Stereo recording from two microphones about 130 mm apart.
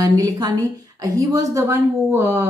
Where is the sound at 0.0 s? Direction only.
30° right (ahead or behind).